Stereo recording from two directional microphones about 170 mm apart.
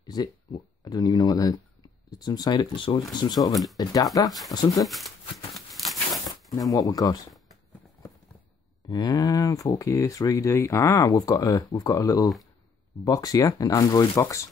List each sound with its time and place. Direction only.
0.0 s speech: 25° left (ahead or behind)
4.8 s speech: centre (ahead or behind)
6.7 s speech: 20° left (ahead or behind)
8.8 s speech: 20° left (ahead or behind)